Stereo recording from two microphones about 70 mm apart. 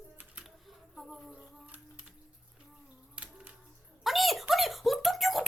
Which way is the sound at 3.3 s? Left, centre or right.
Centre.